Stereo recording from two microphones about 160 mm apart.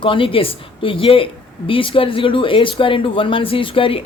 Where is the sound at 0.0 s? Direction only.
35° left (ahead or behind).